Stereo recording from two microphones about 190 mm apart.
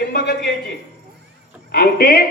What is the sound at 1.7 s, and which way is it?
Speech, 50° left (ahead or behind).